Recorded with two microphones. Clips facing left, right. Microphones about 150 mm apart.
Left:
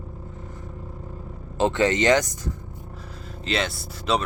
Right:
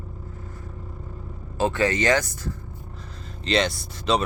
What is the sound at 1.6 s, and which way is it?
Speech, 20° left (ahead or behind).